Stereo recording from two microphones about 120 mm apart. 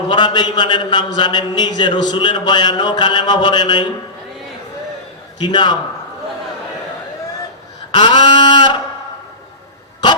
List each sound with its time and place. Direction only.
0.1 s a man's voice: 40° left (ahead or behind)
5.4 s a man's voice: 35° left (ahead or behind)
7.9 s a sound: 45° left (ahead or behind)